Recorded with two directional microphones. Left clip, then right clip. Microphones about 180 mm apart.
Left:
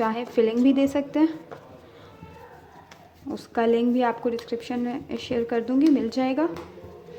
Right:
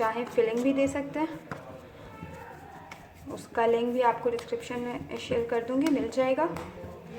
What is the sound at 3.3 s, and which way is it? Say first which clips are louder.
Speech: left 3 dB; 45° left (ahead or behind).